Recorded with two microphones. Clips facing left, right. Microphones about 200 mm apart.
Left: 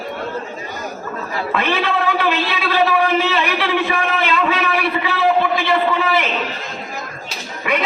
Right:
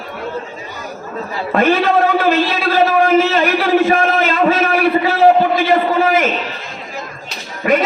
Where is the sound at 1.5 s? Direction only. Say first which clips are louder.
Right 7 dB; 45° right (ahead or behind).